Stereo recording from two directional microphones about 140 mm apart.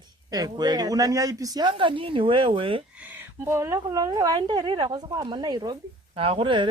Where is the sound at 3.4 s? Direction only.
20° right (ahead or behind).